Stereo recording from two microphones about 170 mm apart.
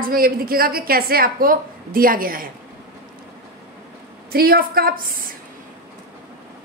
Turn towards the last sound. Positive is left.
turn(degrees=-60)  # may be behind; listen again after turning